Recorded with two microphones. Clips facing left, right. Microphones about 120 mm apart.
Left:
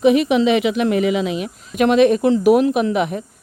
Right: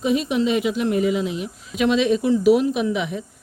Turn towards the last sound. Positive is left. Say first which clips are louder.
# left 5 dB
turn(degrees=55)  # may be behind; listen again after turning